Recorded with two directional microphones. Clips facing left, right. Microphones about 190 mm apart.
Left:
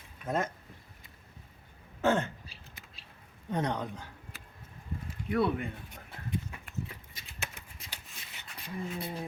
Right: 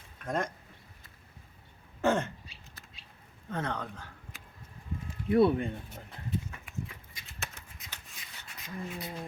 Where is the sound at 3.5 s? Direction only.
15° left (ahead or behind).